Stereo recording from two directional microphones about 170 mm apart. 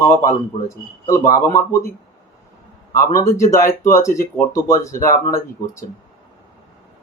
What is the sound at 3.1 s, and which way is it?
Speech, 15° left (ahead or behind).